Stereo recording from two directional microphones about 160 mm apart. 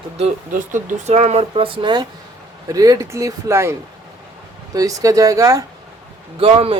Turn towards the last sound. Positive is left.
turn(degrees=-35)  # may be behind; listen again after turning